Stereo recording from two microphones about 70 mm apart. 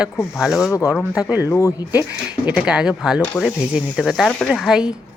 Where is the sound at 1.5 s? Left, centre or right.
Left.